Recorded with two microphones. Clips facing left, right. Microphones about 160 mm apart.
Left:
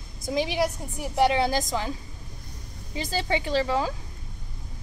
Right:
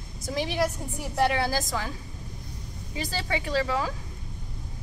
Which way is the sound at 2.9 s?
25° left (ahead or behind).